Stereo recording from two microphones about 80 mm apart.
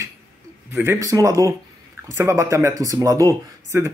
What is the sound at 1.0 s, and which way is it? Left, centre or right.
Speech, right.